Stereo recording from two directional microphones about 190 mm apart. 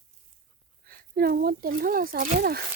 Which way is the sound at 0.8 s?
50° right (ahead or behind).